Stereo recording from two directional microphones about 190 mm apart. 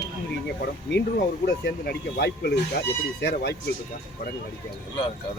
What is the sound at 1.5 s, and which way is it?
Speech, 60° left (ahead or behind).